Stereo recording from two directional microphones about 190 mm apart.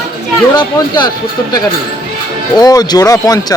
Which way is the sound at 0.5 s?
25° left (ahead or behind).